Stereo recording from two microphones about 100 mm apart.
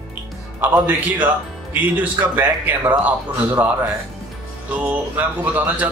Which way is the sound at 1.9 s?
20° right (ahead or behind).